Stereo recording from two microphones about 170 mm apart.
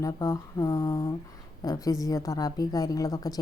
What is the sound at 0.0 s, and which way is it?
Speech, 20° left (ahead or behind).